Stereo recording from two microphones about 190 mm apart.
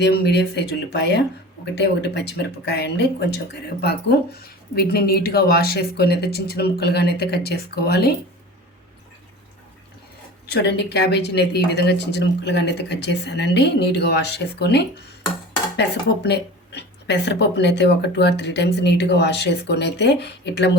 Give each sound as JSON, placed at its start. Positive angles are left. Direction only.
{"t": 0.0, "sound": "speech", "side_deg": 60}
{"t": 10.5, "sound": "speech", "side_deg": 60}